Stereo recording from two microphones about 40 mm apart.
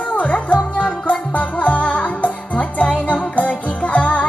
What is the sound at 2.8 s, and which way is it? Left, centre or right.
Music, left.